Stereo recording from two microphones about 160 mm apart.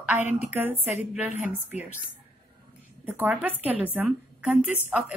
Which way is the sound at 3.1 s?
10° right (ahead or behind).